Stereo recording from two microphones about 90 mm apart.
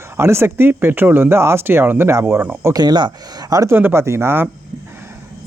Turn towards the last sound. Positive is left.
turn(degrees=-30)  # may be behind; listen again after turning